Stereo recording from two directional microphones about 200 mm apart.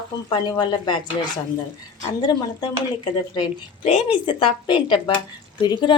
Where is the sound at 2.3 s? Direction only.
20° left (ahead or behind).